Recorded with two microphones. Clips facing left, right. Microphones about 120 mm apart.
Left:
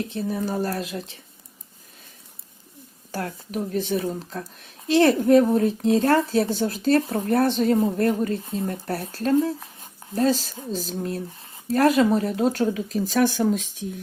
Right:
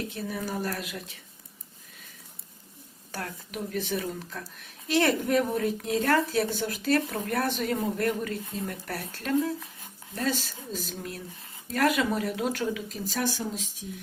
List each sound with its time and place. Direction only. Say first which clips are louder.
0.1 s speech: left 6 dB; 30° left (ahead or behind)
3.1 s a woman's voice: left 7 dB; 35° left (ahead or behind)
13.1 s speech: left 10 dB; 60° left (ahead or behind)